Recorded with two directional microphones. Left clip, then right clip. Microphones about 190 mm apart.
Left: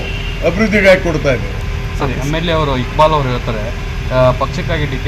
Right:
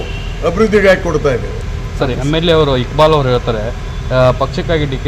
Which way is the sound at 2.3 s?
50° right (ahead or behind).